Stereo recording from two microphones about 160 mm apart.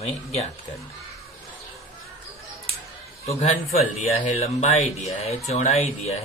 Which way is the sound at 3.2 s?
40° left (ahead or behind).